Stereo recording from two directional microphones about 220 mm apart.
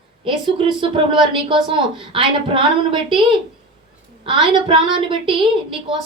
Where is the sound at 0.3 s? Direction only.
25° right (ahead or behind).